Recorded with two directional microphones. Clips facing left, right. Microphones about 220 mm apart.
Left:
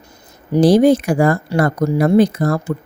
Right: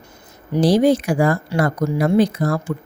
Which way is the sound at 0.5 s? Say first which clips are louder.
Left 4 dB; 50° left (ahead or behind).